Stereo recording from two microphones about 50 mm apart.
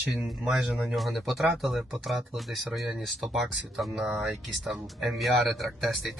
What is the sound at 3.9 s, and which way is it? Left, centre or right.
Speech, centre.